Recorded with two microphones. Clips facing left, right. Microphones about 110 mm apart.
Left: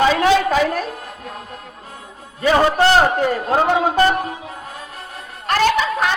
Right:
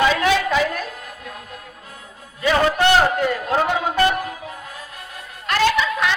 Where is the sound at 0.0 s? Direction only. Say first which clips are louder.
Left 3 dB; 35° left (ahead or behind).